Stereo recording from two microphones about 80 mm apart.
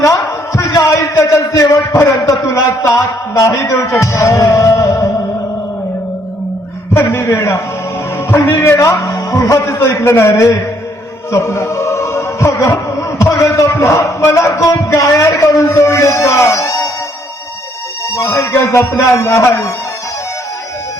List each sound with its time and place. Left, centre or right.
0.5 s a man's voice: left
4.0 s music: left
6.9 s a man's voice: left
11.3 s music: left
14.2 s a man's voice: left
18.1 s a man's voice: left